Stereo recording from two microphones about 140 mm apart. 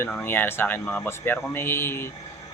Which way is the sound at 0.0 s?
10° left (ahead or behind).